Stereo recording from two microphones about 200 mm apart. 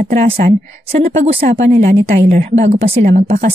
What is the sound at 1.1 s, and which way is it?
Speech, 30° right (ahead or behind).